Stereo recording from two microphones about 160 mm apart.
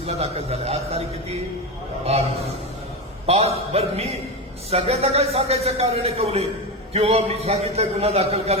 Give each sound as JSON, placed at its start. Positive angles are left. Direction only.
{"t": 0.0, "sound": "speech", "side_deg": -40}